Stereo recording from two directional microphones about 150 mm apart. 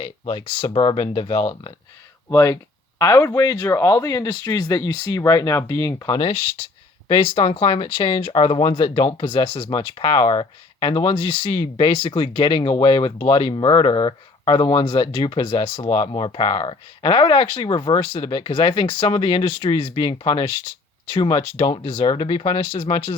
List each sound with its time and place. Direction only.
0.0 s speech: 35° left (ahead or behind)
2.3 s speech: 20° left (ahead or behind)
6.1 s speech: 35° left (ahead or behind)